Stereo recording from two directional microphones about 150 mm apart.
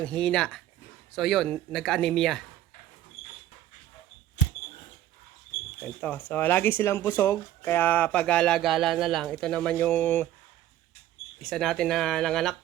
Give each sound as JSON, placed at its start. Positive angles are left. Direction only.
{"t": 0.0, "sound": "speech", "side_deg": 5}
{"t": 5.8, "sound": "speech", "side_deg": 10}
{"t": 11.3, "sound": "speech", "side_deg": 0}